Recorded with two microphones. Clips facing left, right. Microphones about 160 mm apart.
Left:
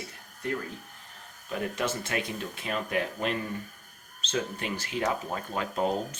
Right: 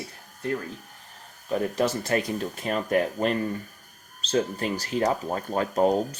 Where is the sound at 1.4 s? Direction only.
35° right (ahead or behind).